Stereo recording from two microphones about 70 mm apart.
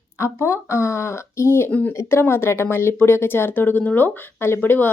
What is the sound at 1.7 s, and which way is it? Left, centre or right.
Speech, left.